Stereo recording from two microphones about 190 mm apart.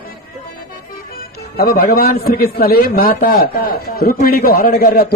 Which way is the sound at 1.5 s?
50° left (ahead or behind).